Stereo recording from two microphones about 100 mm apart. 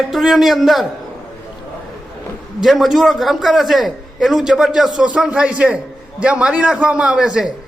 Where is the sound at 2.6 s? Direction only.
Centre (ahead or behind).